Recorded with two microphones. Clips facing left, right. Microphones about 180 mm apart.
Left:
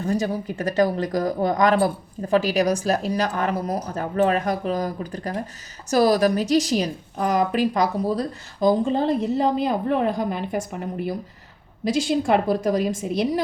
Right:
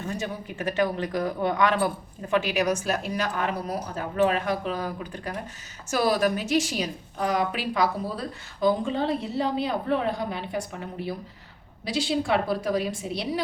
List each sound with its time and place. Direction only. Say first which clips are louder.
0.0 s a woman's voice: left 8 dB; 35° left (ahead or behind)